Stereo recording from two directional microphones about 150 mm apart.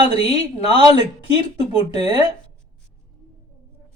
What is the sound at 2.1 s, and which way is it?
Speech, 30° right (ahead or behind).